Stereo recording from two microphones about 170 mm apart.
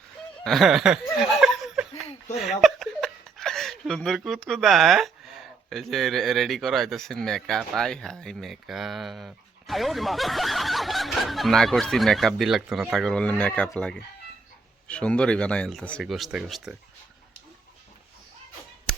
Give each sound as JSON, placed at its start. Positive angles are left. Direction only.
{"t": 0.4, "sound": "speech", "side_deg": 0}
{"t": 1.1, "sound": "chuckle", "side_deg": 0}
{"t": 2.0, "sound": "a sound", "side_deg": 40}
{"t": 2.4, "sound": "speech", "side_deg": 0}